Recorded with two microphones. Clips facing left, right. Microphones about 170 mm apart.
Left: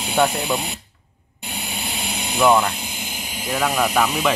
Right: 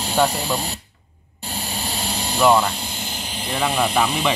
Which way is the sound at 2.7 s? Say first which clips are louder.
Right 1 dB; 30° right (ahead or behind).